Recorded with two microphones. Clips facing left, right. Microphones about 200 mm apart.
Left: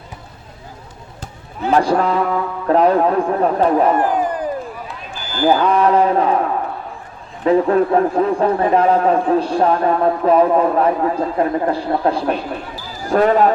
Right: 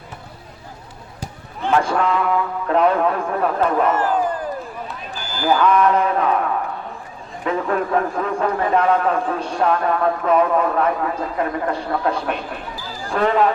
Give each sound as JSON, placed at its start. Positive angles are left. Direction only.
{"t": 1.7, "sound": "a man's voice", "side_deg": 35}
{"t": 3.9, "sound": "a sound", "side_deg": 15}
{"t": 5.4, "sound": "a man's voice", "side_deg": 40}
{"t": 7.4, "sound": "a man's voice", "side_deg": 35}
{"t": 13.1, "sound": "speech", "side_deg": 45}